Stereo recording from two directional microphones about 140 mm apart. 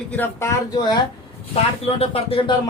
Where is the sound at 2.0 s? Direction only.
45° left (ahead or behind).